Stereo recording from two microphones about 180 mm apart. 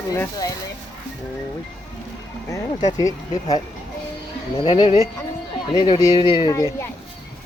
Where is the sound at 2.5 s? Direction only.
20° left (ahead or behind).